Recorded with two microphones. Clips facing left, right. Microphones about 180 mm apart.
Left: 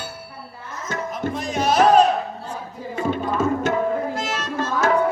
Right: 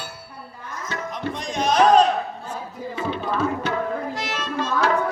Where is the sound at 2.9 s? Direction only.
45° left (ahead or behind).